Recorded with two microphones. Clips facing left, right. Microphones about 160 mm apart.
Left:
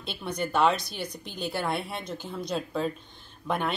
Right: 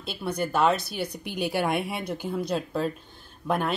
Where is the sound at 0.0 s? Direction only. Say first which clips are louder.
Right 3 dB; 5° right (ahead or behind).